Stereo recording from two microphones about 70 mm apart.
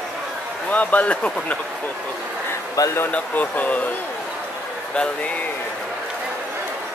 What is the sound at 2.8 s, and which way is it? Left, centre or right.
Speech, left.